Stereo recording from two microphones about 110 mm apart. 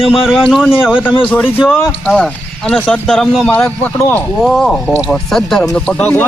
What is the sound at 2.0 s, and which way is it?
A man's voice, 10° left (ahead or behind).